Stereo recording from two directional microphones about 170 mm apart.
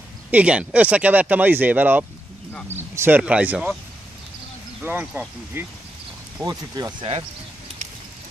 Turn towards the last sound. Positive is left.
turn(degrees=-25)  # may be behind; listen again after turning